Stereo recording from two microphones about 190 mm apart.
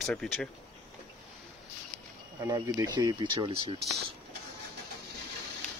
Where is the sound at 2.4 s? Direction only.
15° right (ahead or behind).